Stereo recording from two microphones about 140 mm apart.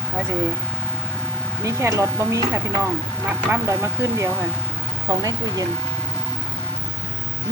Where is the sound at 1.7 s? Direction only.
20° right (ahead or behind).